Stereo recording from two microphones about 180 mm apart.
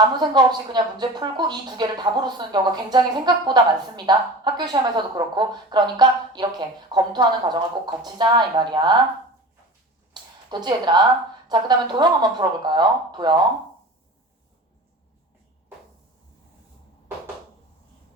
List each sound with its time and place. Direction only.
0.0 s speech: 25° right (ahead or behind)
10.2 s a sound: 25° right (ahead or behind)
10.5 s speech: 25° right (ahead or behind)